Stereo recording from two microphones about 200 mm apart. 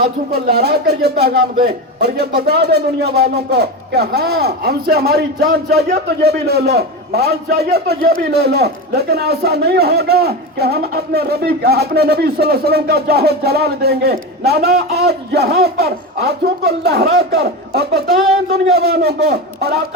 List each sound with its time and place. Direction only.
0.3 s speech: 55° right (ahead or behind)